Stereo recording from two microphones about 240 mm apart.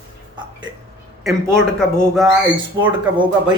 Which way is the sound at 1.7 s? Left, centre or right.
Centre.